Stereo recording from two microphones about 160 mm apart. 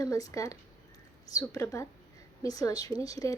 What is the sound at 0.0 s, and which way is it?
A woman's voice, 20° left (ahead or behind).